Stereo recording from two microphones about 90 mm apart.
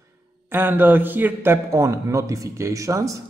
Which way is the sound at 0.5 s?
20° right (ahead or behind).